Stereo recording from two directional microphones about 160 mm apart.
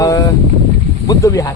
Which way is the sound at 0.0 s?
20° left (ahead or behind).